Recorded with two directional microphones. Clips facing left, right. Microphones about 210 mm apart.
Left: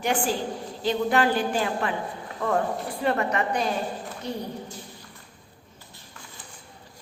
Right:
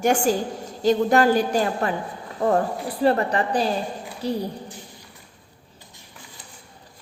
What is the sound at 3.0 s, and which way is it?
A woman's voice, 35° right (ahead or behind).